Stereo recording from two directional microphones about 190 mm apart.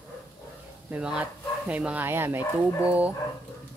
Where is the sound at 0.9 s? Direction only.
5° right (ahead or behind).